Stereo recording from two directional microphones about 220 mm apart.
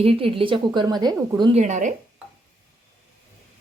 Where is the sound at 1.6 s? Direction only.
35° right (ahead or behind).